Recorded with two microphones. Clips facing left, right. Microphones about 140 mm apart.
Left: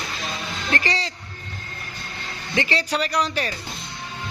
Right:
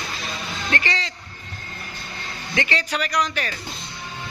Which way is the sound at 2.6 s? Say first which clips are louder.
Left 2 dB; 35° left (ahead or behind).